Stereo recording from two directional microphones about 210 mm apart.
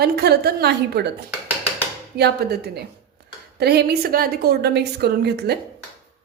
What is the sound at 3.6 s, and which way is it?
A woman's voice, 50° right (ahead or behind).